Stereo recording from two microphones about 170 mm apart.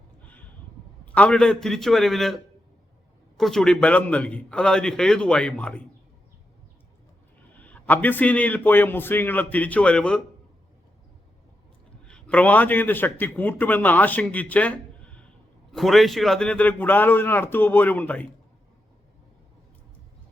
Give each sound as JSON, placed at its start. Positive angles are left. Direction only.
{"t": 1.0, "sound": "a man's voice", "side_deg": 10}
{"t": 7.5, "sound": "a man's voice", "side_deg": 10}
{"t": 12.0, "sound": "a man's voice", "side_deg": 5}